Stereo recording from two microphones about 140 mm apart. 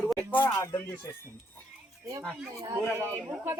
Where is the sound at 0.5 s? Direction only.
25° left (ahead or behind).